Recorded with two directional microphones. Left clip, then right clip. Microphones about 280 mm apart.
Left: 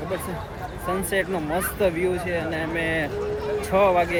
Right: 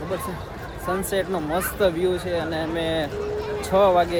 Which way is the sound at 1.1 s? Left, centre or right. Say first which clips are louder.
Even; centre.